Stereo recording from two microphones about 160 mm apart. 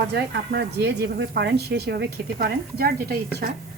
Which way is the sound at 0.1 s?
90° right.